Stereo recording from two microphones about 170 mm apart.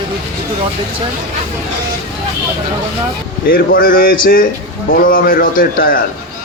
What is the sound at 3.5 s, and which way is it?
A man's voice, 55° left (ahead or behind).